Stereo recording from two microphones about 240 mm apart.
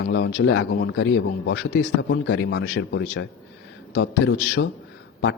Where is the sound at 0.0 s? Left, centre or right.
Left.